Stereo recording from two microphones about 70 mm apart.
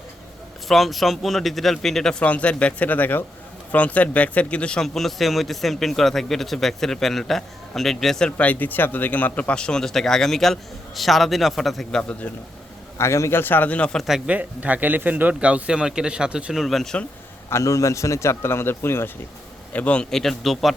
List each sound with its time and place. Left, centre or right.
0.7 s a man's voice: centre
2.2 s speech: centre
4.9 s a man's voice: centre
8.4 s speech: left; by 11.9 s centre
11.9 s speech: centre
13.0 s speech: left
13.4 s speech: left
14.3 s speech: right; by 17.0 s centre
17.5 s speech: left
19.7 s speech: centre